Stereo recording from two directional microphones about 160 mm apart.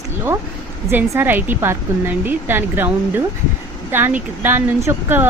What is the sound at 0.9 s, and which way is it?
Speech, 15° right (ahead or behind).